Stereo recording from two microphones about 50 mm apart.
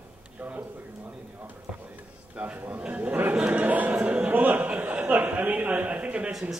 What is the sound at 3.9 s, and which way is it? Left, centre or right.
Chuckle, right.